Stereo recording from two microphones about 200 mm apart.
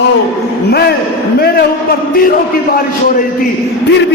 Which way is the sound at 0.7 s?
50° left (ahead or behind).